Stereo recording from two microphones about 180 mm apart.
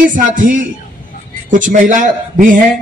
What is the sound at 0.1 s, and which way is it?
A man's voice, 45° right (ahead or behind).